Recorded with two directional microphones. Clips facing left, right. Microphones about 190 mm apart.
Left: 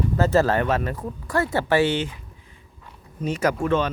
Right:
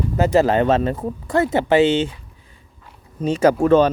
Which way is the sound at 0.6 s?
25° right (ahead or behind).